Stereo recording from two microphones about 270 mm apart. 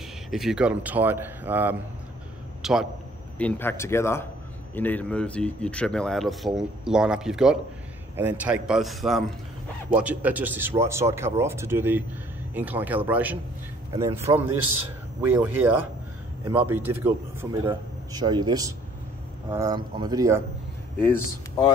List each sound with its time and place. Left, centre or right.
0.3 s a man's voice: centre
15.2 s speech: centre
21.0 s speech: centre